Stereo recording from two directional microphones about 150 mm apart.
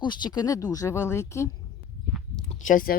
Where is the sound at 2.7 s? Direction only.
70° left (ahead or behind).